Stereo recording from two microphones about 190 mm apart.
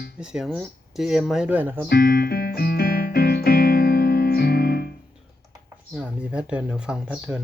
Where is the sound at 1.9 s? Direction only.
55° left (ahead or behind).